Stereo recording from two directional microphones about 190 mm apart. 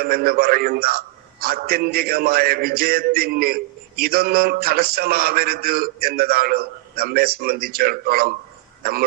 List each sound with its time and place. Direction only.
0.0 s a man's voice: 50° right (ahead or behind)